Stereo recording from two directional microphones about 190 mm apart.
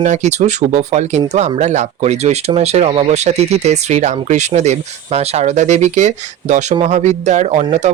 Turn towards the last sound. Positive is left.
turn(degrees=-35)  # may be behind; listen again after turning